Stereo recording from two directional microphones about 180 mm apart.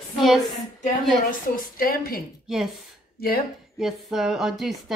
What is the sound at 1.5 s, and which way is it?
Speech, 55° left (ahead or behind).